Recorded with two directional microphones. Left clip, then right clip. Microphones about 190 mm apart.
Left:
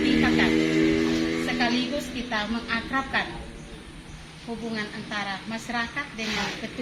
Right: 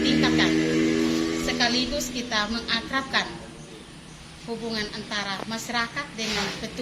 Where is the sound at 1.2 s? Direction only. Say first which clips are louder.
Even; centre (ahead or behind).